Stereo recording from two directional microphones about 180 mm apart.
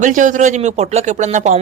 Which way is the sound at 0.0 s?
45° right (ahead or behind).